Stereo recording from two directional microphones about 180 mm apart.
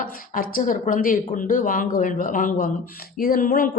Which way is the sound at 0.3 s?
50° left (ahead or behind).